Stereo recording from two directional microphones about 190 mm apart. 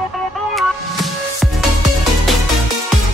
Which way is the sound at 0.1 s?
Centre (ahead or behind).